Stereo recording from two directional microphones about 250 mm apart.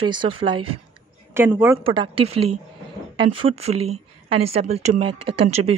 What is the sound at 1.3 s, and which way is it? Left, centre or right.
Speech, centre.